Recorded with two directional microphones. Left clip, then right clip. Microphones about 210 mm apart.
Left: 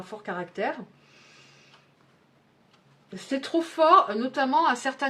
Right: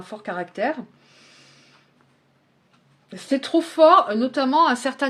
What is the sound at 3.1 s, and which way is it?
Speech, 40° right (ahead or behind).